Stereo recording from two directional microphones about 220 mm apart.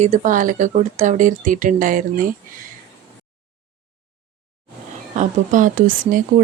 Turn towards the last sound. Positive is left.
turn(degrees=-40)  # may be behind; listen again after turning